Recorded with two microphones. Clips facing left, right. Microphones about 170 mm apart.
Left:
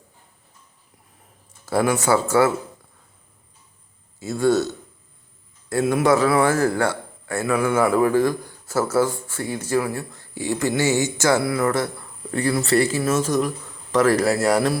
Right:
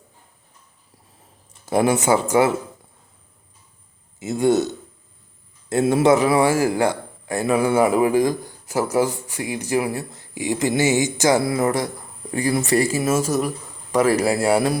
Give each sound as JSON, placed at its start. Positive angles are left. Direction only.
{"t": 1.6, "sound": "speech", "side_deg": -20}
{"t": 4.2, "sound": "a man's voice", "side_deg": -20}